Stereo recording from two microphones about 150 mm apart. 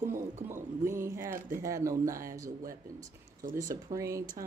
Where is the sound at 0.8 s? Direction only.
15° right (ahead or behind).